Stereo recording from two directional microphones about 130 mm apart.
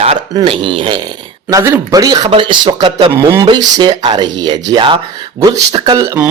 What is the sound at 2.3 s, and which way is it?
Speech, 40° right (ahead or behind).